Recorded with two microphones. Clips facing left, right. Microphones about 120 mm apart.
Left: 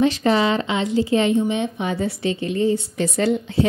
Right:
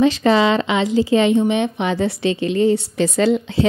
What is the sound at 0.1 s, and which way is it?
A woman's voice, 90° right.